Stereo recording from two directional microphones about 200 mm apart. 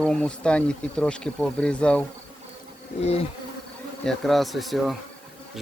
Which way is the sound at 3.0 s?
30° left (ahead or behind).